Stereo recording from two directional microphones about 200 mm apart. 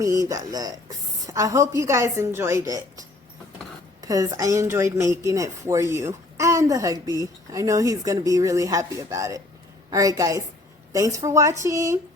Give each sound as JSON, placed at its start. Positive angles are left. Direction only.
{"t": 0.0, "sound": "speech", "side_deg": -15}
{"t": 4.0, "sound": "speech", "side_deg": -15}